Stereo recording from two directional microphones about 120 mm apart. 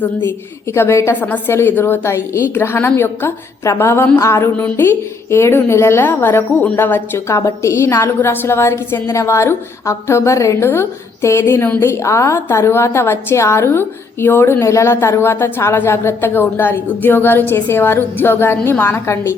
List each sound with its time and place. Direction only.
0.7 s a woman's voice: 20° left (ahead or behind)